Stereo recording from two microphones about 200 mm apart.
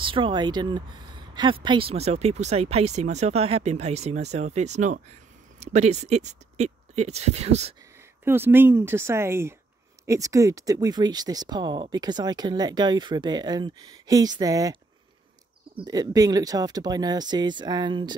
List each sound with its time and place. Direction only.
0.0 s speech: 25° right (ahead or behind)
8.3 s speech: 10° right (ahead or behind)